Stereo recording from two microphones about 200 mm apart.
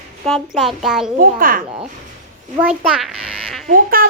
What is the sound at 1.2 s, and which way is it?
Speech, 45° right (ahead or behind).